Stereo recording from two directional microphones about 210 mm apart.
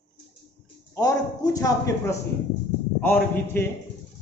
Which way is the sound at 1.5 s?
15° left (ahead or behind).